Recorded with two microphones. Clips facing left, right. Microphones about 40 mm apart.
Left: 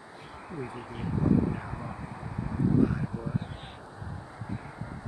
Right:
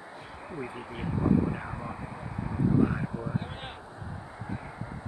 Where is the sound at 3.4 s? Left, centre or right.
Right.